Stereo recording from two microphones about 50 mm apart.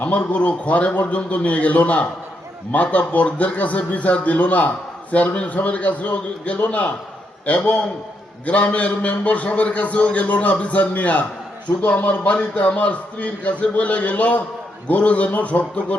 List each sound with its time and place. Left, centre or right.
0.0 s a man's voice: left